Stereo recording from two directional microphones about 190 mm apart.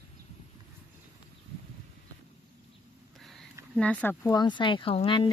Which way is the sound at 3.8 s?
5° left (ahead or behind).